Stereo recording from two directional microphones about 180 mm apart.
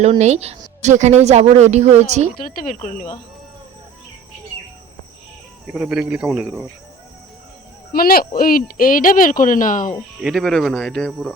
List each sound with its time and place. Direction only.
0.0 s speech: 40° right (ahead or behind)
2.3 s speech: 45° left (ahead or behind)
5.6 s speech: 5° right (ahead or behind)
7.9 s speech: 55° left (ahead or behind)
10.2 s speech: centre (ahead or behind)